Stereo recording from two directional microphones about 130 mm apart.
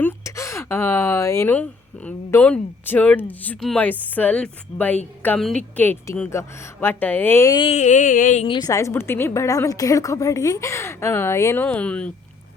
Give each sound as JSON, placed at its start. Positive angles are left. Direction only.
{"t": 0.0, "sound": "a woman's voice", "side_deg": 20}
{"t": 7.7, "sound": "a sound", "side_deg": 65}
{"t": 8.4, "sound": "a woman's voice", "side_deg": 30}